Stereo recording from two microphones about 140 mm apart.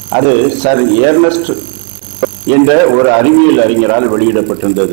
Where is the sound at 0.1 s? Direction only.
15° right (ahead or behind).